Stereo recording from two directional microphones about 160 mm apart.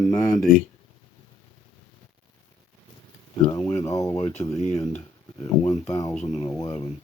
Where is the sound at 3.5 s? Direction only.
20° left (ahead or behind).